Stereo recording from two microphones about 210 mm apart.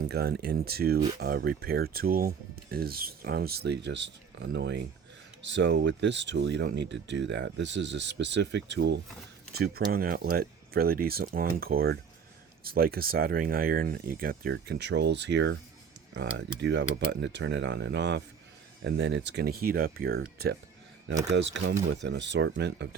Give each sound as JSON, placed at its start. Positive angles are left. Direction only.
{"t": 0.0, "sound": "speech", "side_deg": -50}
{"t": 21.2, "sound": "speech", "side_deg": -55}